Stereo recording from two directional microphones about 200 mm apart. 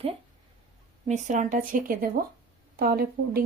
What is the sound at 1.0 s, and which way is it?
Speech, 35° right (ahead or behind).